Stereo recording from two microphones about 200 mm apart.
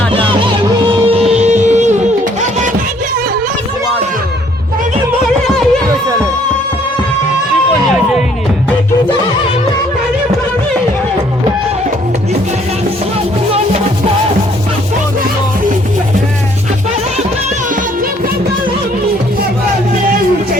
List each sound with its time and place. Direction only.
0.1 s music: 25° right (ahead or behind)